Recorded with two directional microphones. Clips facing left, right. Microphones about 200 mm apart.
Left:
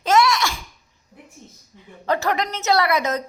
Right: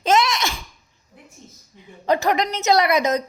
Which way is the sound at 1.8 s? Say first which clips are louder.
Right 3 dB; 15° right (ahead or behind).